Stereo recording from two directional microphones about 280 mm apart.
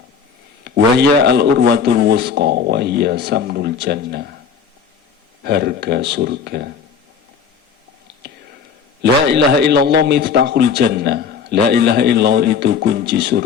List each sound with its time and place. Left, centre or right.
0.6 s a man's voice: right
5.4 s a man's voice: right
9.0 s a man's voice: right